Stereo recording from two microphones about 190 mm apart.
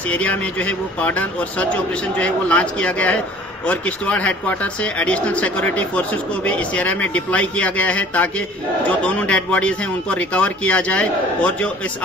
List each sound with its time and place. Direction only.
0.1 s speech: 5° left (ahead or behind)